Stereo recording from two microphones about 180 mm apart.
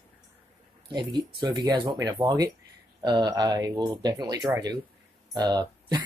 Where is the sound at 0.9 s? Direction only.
25° right (ahead or behind).